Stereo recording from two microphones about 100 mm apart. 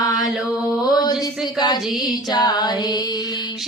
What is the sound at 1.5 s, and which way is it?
Music, 45° left (ahead or behind).